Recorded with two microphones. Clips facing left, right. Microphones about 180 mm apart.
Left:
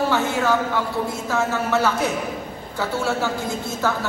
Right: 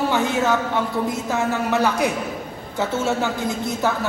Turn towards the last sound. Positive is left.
turn(degrees=-20)  # may be behind; listen again after turning